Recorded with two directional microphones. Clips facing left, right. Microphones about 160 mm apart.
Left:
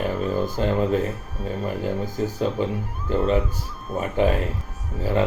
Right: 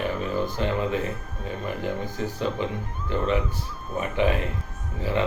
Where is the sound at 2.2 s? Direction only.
40° left (ahead or behind).